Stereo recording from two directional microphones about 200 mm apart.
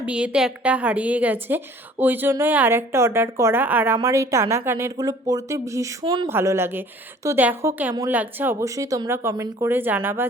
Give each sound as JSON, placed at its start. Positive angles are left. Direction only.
{"t": 0.0, "sound": "a woman's voice", "side_deg": -5}